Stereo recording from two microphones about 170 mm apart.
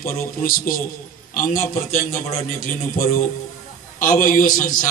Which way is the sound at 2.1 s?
50° left (ahead or behind).